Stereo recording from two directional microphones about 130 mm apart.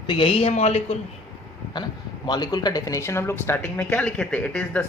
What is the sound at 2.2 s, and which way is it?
Speech, 35° left (ahead or behind).